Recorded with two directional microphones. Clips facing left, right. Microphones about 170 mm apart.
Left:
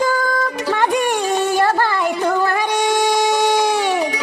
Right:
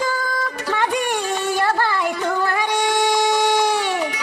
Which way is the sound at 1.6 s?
45° left (ahead or behind).